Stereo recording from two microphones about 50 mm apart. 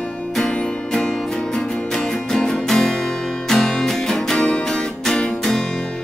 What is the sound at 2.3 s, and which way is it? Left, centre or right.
Music, centre.